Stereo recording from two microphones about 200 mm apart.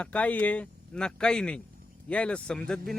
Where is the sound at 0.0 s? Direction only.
5° left (ahead or behind).